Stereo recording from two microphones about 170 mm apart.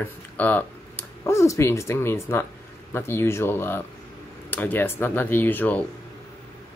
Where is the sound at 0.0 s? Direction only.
10° left (ahead or behind).